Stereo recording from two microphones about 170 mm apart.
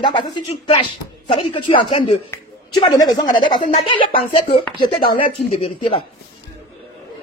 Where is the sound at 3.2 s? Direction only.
25° left (ahead or behind).